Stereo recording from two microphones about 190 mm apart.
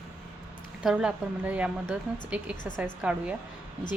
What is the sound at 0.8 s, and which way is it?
A woman's voice, 5° right (ahead or behind).